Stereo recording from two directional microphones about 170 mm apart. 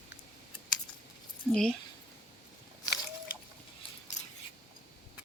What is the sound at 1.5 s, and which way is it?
Speech, 5° left (ahead or behind).